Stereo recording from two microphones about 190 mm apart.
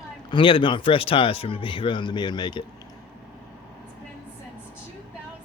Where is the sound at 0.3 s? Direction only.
25° left (ahead or behind).